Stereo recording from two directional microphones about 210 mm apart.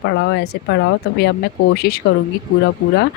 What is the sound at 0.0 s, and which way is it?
Speech, 55° left (ahead or behind).